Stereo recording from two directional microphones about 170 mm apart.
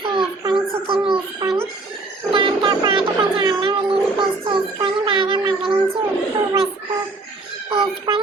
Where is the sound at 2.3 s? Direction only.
30° right (ahead or behind).